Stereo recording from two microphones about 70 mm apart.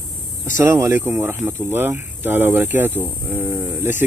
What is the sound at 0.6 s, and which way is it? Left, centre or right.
Speech, right.